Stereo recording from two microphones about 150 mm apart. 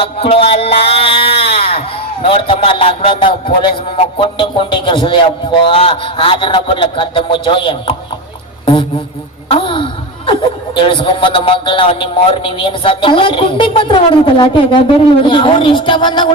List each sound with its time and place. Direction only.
0.0 s a sound: 40° left (ahead or behind)
2.3 s a man's voice: 35° left (ahead or behind)
9.5 s a man's voice: 35° left (ahead or behind)